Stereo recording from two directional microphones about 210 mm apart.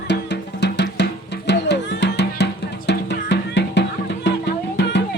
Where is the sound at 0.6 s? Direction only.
55° left (ahead or behind).